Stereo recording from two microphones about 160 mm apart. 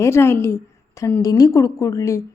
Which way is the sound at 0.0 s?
15° left (ahead or behind).